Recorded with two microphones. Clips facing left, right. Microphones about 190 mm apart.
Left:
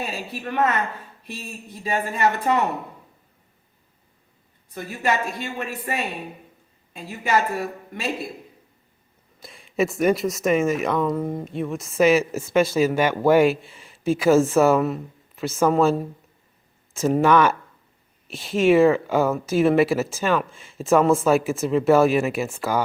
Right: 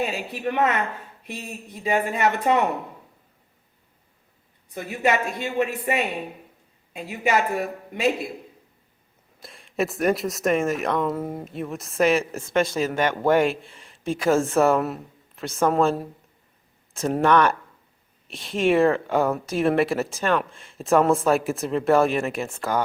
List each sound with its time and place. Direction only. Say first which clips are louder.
0.0 s a woman's voice: right 4 dB; 20° right (ahead or behind)
4.7 s a woman's voice: right 2 dB; 20° right (ahead or behind)
9.4 s speech: left 3 dB; centre (ahead or behind)